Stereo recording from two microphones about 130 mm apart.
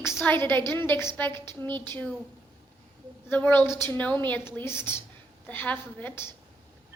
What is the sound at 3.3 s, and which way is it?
Speech, 15° left (ahead or behind).